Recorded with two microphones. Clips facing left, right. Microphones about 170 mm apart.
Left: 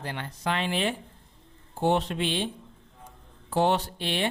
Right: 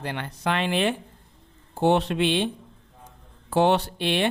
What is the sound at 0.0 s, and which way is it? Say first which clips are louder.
A man's voice: right 3 dB; 70° right (ahead or behind).